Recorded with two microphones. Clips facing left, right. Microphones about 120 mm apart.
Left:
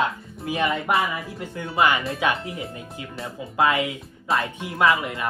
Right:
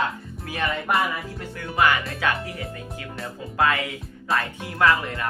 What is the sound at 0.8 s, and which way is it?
Music, centre (ahead or behind).